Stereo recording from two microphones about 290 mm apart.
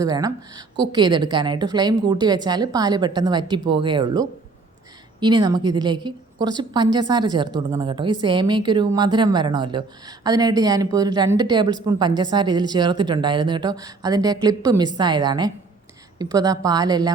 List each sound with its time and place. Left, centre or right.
0.0 s a woman's voice: centre